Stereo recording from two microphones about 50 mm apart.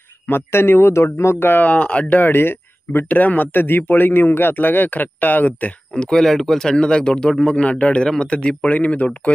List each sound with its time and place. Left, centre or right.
0.3 s speech: left
1.5 s speech: left
2.1 s speech: left
3.1 s speech: left
5.9 s speech: centre
8.4 s speech: left